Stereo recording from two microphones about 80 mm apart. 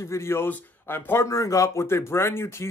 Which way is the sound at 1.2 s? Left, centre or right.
Left.